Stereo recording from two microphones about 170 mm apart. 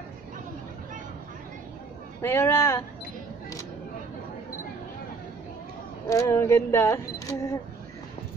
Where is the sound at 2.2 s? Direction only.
15° left (ahead or behind).